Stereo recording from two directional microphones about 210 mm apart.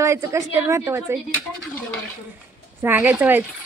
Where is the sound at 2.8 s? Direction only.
10° right (ahead or behind).